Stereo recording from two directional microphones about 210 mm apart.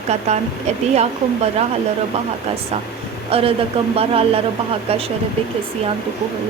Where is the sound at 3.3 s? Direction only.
30° right (ahead or behind).